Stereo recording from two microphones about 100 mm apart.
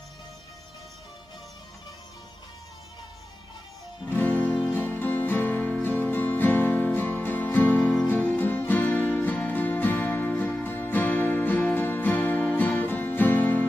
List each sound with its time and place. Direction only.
4.3 s music: 15° left (ahead or behind)
7.8 s music: 5° left (ahead or behind)
8.1 s music: 15° left (ahead or behind)